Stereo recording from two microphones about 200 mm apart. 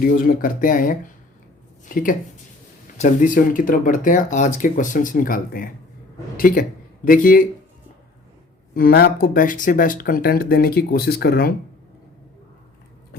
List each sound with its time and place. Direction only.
0.0 s speech: 45° left (ahead or behind)
3.0 s speech: 40° left (ahead or behind)
8.7 s speech: 50° left (ahead or behind)